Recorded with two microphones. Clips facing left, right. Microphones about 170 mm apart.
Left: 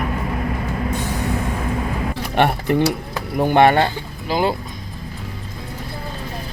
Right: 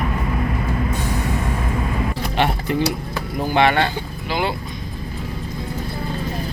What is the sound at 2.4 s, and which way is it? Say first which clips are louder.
Speech: left 4 dB; 55° left (ahead or behind).